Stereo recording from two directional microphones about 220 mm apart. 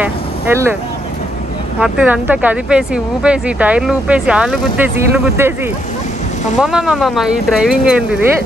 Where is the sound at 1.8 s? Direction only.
5° right (ahead or behind).